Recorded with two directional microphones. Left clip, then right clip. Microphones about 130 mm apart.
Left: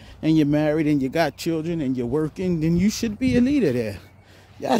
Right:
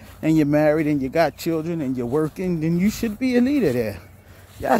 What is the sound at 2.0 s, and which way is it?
Speech, 5° left (ahead or behind).